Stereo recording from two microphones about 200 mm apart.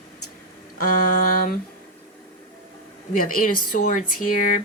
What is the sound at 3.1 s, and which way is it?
Speech, 45° left (ahead or behind).